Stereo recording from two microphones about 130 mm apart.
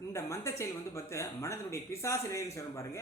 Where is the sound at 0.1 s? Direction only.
20° left (ahead or behind).